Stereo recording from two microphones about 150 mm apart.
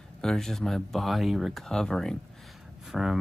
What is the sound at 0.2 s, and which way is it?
Speech, 5° left (ahead or behind).